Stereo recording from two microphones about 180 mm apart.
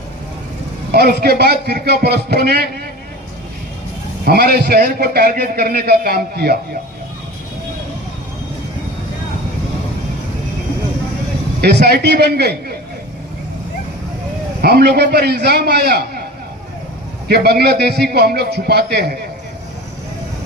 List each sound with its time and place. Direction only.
0.9 s a man's voice: 65° right (ahead or behind)
4.3 s a man's voice: 60° right (ahead or behind)
11.6 s a man's voice: 65° right (ahead or behind)
14.6 s a man's voice: 65° right (ahead or behind)
17.2 s a man's voice: 60° right (ahead or behind)